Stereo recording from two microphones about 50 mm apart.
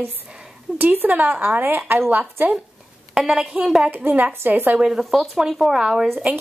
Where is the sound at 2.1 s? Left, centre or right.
Right.